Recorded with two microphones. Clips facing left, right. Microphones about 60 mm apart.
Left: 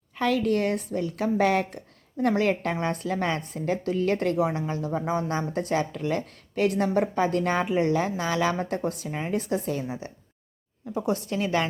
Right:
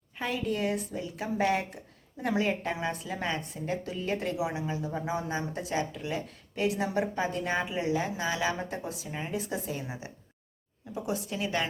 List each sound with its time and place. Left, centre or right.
0.2 s a woman's voice: left
5.4 s a woman's voice: left
10.9 s a woman's voice: left